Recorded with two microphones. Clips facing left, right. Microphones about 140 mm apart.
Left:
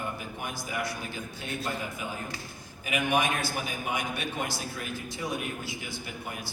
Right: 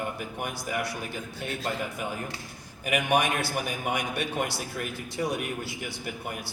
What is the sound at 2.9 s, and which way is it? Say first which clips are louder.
A man's voice: right 2 dB; 60° right (ahead or behind).